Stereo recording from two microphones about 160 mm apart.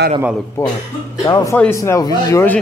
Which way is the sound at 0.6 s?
20° left (ahead or behind).